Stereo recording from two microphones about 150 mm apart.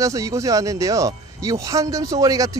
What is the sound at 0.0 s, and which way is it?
Speech, 20° right (ahead or behind).